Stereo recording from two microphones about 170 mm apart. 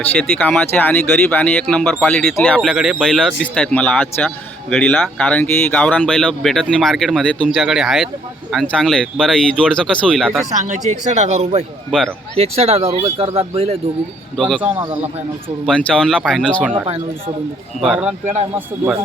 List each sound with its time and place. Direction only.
0.0 s speech: 10° left (ahead or behind)
10.8 s speech: 40° right (ahead or behind)
11.9 s speech: centre (ahead or behind)
12.4 s speech: 35° right (ahead or behind)
14.3 s speech: centre (ahead or behind)
15.6 s speech: 5° left (ahead or behind)
16.7 s speech: 30° right (ahead or behind)
17.7 s speech: 5° right (ahead or behind)